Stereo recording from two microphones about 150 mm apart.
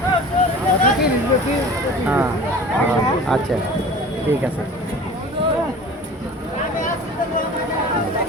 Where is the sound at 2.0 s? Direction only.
10° right (ahead or behind).